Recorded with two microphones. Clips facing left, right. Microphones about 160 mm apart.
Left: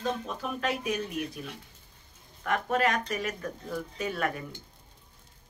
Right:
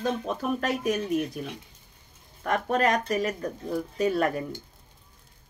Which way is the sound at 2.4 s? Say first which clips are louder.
Right 3 dB; 40° right (ahead or behind).